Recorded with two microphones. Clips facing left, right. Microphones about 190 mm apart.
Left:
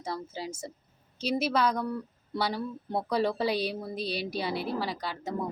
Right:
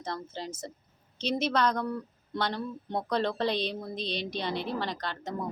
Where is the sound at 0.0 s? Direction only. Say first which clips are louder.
Left 1 dB; 5° left (ahead or behind).